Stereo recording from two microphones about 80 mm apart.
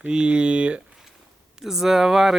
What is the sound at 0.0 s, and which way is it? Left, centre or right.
Speech, centre.